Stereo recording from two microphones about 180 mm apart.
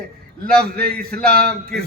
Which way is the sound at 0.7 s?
55° right (ahead or behind).